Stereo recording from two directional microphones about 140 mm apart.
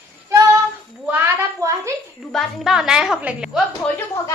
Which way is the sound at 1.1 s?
20° right (ahead or behind).